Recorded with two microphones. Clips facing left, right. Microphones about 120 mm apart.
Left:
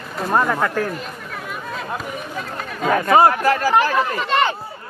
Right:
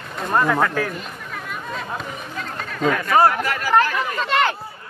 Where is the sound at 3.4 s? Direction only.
40° left (ahead or behind).